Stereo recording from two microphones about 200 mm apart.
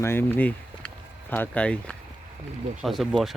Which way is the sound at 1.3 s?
5° left (ahead or behind).